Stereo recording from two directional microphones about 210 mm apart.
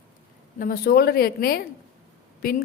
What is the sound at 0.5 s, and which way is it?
A woman's voice, 40° left (ahead or behind).